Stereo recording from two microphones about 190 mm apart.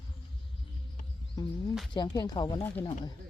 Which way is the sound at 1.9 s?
25° left (ahead or behind).